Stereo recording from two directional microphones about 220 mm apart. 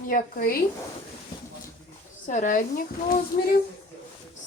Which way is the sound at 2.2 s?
35° left (ahead or behind).